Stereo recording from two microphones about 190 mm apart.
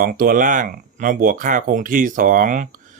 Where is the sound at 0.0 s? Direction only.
45° right (ahead or behind).